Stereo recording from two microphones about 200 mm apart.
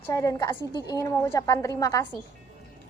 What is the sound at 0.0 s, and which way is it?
A woman's voice, 15° left (ahead or behind).